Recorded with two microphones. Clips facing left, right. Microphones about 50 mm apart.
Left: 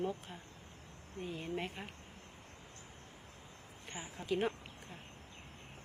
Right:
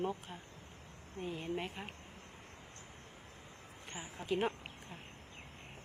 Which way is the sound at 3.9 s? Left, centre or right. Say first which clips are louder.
Even; centre.